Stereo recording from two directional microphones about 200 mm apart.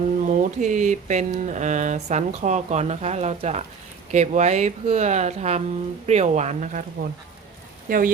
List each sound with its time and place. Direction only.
0.3 s speech: 35° right (ahead or behind)
7.9 s speech: 45° right (ahead or behind)